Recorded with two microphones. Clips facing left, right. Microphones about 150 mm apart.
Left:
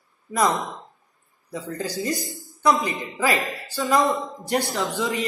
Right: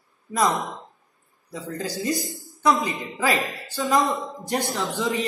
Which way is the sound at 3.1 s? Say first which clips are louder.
Even; centre (ahead or behind).